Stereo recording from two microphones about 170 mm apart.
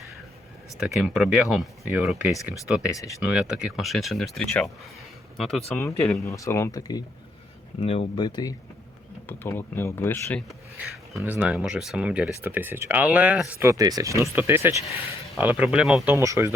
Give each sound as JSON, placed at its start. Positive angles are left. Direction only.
{"t": 1.0, "sound": "speech", "side_deg": -5}
{"t": 5.7, "sound": "speech", "side_deg": 15}
{"t": 7.8, "sound": "speech", "side_deg": 35}
{"t": 9.2, "sound": "speech", "side_deg": 15}
{"t": 10.8, "sound": "speech", "side_deg": -10}
{"t": 16.1, "sound": "speech", "side_deg": -15}